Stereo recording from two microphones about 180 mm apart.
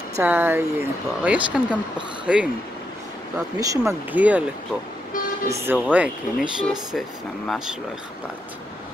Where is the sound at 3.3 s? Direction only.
20° right (ahead or behind).